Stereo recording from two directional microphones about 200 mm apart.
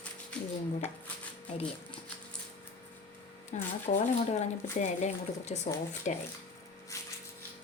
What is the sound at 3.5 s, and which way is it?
Speech, 35° left (ahead or behind).